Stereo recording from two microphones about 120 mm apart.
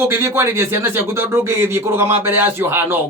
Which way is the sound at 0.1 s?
20° right (ahead or behind).